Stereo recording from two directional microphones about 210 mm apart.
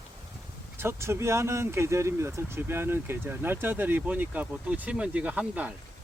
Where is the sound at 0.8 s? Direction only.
10° right (ahead or behind).